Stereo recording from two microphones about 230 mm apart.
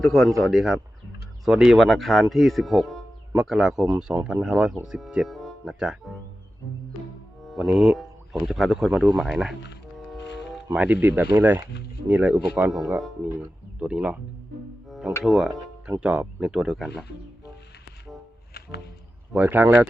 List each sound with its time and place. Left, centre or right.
0.0 s speech: centre
7.4 s speech: centre
10.2 s music: left
10.5 s speech: centre
14.8 s music: centre
15.2 s speech: centre
19.3 s speech: centre